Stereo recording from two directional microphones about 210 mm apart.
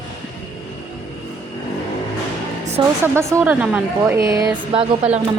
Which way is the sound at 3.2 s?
10° right (ahead or behind).